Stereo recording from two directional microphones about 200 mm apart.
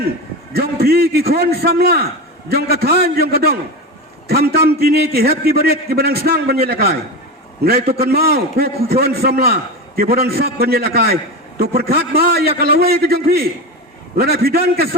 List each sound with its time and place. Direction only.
0.5 s a man's voice: 50° right (ahead or behind)